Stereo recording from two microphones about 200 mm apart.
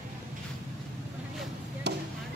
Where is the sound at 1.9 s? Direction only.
55° right (ahead or behind).